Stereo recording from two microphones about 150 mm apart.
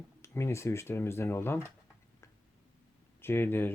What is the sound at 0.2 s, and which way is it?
Speech, 20° left (ahead or behind).